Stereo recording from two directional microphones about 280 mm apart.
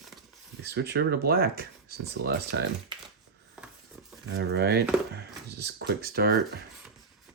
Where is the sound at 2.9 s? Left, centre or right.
Centre.